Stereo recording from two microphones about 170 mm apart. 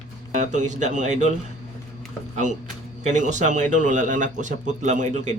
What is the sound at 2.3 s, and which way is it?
Speech, 45° right (ahead or behind).